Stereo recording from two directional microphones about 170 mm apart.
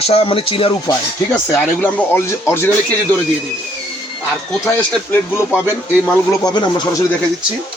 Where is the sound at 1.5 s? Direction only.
15° left (ahead or behind).